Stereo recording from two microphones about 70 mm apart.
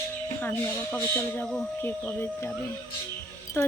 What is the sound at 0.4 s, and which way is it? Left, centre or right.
Speech, left.